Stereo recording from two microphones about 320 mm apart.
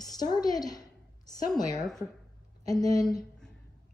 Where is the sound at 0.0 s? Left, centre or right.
Centre.